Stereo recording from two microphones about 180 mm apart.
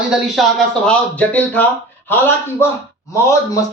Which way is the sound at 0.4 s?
Centre (ahead or behind).